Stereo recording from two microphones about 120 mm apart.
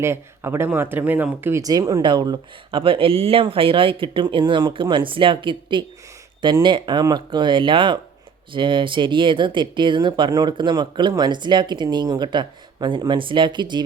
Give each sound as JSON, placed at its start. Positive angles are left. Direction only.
{"t": 0.0, "sound": "speech", "side_deg": -20}
{"t": 1.6, "sound": "speech", "side_deg": -30}
{"t": 2.8, "sound": "speech", "side_deg": -50}